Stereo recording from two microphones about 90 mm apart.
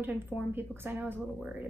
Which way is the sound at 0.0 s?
20° right (ahead or behind).